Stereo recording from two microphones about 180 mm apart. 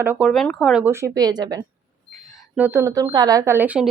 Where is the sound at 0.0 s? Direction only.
10° right (ahead or behind).